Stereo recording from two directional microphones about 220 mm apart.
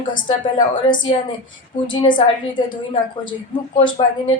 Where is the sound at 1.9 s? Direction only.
20° left (ahead or behind).